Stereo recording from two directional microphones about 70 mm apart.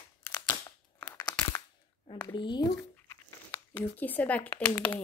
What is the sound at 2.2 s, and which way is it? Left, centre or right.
Speech, left.